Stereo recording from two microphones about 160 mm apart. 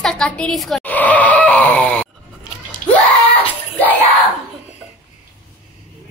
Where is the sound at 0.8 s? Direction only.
10° left (ahead or behind).